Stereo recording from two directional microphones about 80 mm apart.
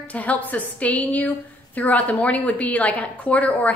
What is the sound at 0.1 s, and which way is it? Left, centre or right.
A woman's voice, centre.